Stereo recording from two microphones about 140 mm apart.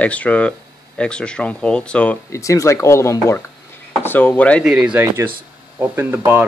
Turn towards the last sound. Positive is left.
turn(degrees=-15)  # may be behind; listen again after turning